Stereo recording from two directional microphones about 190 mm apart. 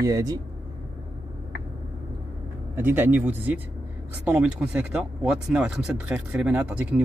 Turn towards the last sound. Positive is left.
turn(degrees=-5)  # may be behind; listen again after turning